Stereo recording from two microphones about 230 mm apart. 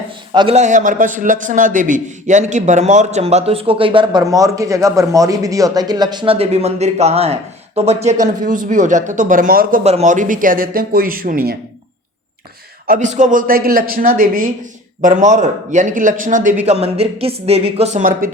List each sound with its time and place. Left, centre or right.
0.3 s a man's voice: right
12.9 s a man's voice: right